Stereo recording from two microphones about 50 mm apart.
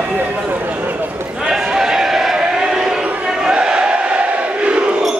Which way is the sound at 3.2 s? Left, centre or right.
Centre.